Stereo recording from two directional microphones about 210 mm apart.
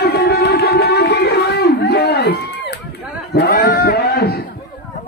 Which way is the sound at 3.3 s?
45° left (ahead or behind).